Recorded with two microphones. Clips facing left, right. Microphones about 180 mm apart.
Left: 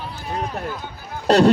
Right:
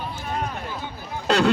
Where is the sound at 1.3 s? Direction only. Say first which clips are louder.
Left 6 dB; 35° left (ahead or behind).